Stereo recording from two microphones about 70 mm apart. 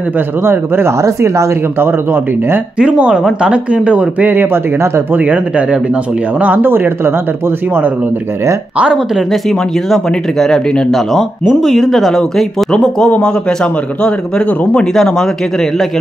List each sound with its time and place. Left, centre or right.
0.4 s speech: right
2.8 s speech: centre
4.7 s speech: right
5.1 s speech: right
8.9 s a man's voice: centre